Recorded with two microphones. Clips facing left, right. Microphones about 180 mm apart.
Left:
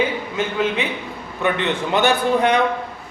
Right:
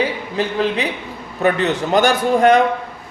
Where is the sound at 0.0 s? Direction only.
35° right (ahead or behind).